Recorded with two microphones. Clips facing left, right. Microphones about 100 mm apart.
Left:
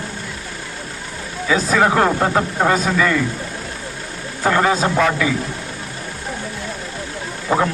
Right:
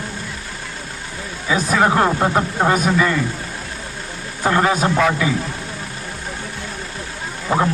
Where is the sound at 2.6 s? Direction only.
15° right (ahead or behind).